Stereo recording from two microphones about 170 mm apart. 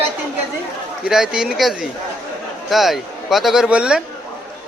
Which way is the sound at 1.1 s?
5° right (ahead or behind).